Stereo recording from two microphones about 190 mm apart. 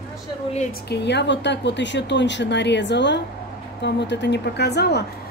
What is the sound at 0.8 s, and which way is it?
A woman's voice, 65° left (ahead or behind).